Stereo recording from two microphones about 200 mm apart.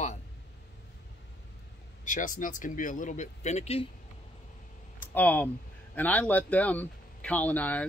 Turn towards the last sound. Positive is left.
turn(degrees=10)  # may be behind; listen again after turning